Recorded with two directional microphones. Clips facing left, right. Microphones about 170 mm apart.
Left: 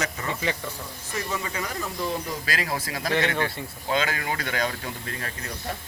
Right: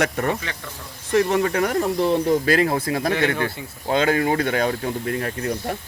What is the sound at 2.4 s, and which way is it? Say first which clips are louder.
Speech: right 10 dB; 30° right (ahead or behind).